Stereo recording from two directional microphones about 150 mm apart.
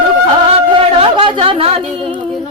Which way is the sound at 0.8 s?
35° right (ahead or behind).